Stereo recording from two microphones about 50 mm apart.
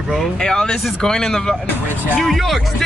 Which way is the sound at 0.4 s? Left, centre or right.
Centre.